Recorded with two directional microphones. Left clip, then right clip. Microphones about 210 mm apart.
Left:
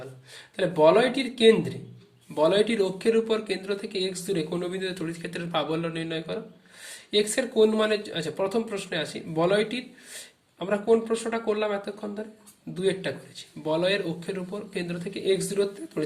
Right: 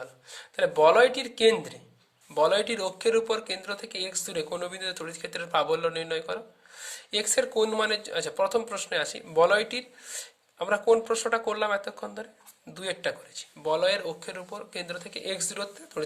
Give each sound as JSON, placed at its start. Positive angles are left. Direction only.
{"t": 0.3, "sound": "speech", "side_deg": -45}